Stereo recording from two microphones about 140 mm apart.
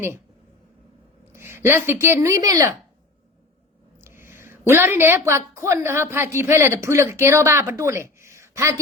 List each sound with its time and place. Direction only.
1.3 s speech: 15° right (ahead or behind)
4.0 s a woman's voice: 15° right (ahead or behind)